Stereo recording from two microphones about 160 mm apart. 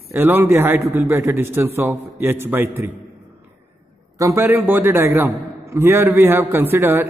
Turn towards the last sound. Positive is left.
turn(degrees=-15)  # may be behind; listen again after turning